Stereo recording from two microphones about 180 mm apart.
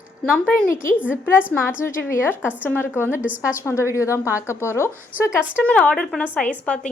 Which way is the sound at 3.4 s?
15° left (ahead or behind).